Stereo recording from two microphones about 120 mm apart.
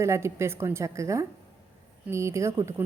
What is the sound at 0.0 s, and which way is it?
A woman's voice, 25° right (ahead or behind).